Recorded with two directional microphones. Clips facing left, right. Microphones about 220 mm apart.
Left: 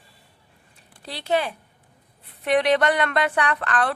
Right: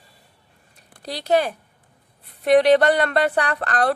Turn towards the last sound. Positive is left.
turn(degrees=-40)  # may be behind; listen again after turning